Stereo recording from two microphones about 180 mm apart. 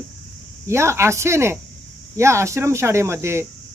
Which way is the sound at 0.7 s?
15° right (ahead or behind).